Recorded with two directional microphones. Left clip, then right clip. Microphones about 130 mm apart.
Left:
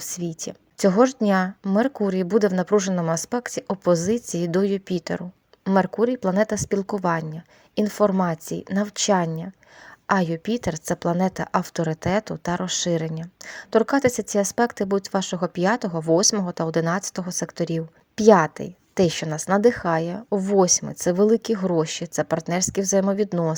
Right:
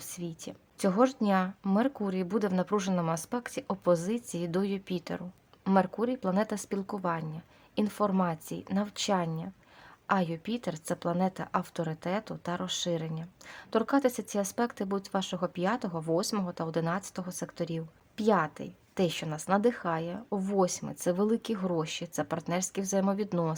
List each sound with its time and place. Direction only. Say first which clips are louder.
0.0 s speech: left 10 dB; 40° left (ahead or behind)